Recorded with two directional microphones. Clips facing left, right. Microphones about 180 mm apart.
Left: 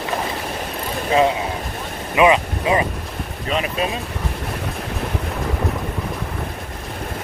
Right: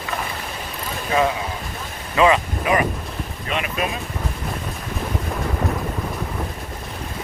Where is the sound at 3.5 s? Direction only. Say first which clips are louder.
Left 3 dB; 35° left (ahead or behind).